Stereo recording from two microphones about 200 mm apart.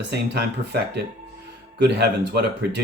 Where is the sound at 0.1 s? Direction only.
55° right (ahead or behind).